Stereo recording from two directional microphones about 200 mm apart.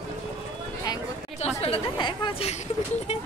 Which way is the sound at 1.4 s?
30° left (ahead or behind).